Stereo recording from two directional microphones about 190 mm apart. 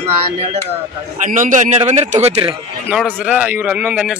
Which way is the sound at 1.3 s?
40° right (ahead or behind).